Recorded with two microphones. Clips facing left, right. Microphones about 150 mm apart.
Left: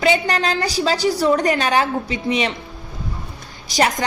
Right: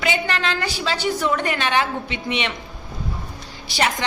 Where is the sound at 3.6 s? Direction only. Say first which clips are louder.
Left 4 dB; 40° left (ahead or behind).